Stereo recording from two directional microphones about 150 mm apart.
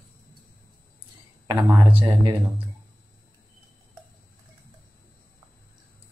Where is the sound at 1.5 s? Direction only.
25° right (ahead or behind).